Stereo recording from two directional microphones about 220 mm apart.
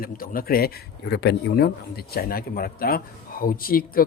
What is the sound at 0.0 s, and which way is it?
Speech, 40° left (ahead or behind).